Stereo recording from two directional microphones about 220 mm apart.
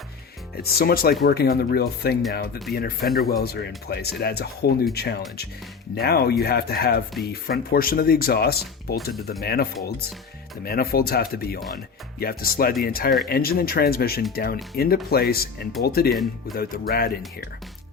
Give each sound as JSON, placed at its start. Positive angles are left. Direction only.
{"t": 0.5, "sound": "speech", "side_deg": 45}